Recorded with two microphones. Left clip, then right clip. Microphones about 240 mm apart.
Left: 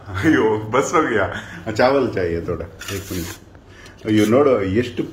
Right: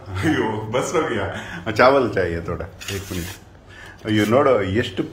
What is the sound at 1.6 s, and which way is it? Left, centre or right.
Speech, centre.